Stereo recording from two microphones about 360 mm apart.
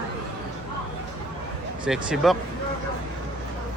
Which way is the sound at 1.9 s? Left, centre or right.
Centre.